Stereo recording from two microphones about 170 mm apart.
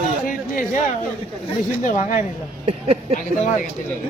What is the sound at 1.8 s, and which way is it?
Speech, 50° left (ahead or behind).